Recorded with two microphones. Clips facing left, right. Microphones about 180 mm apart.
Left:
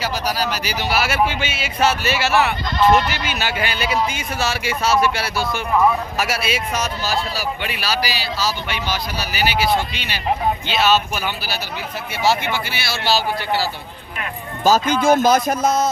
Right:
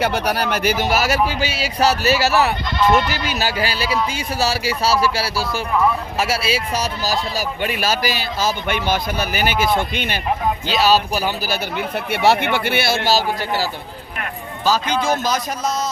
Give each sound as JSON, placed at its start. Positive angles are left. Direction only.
{"t": 0.0, "sound": "a man's voice", "side_deg": -60}
{"t": 10.7, "sound": "a man's voice", "side_deg": -35}
{"t": 14.6, "sound": "a man's voice", "side_deg": 45}